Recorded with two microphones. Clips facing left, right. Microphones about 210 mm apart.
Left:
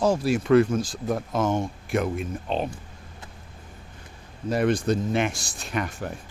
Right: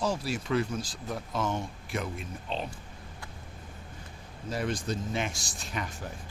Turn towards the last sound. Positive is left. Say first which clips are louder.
# left 7 dB
turn(degrees=65)  # may be behind; listen again after turning